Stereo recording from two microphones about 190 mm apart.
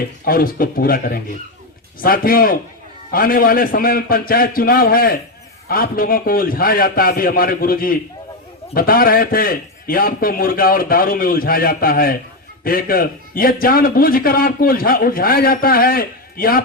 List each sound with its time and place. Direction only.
0.3 s a man's voice: 50° left (ahead or behind)